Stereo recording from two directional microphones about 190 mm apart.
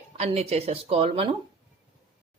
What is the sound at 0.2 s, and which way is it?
A woman's voice, 35° right (ahead or behind).